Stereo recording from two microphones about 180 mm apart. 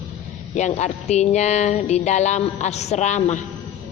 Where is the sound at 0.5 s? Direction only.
40° left (ahead or behind).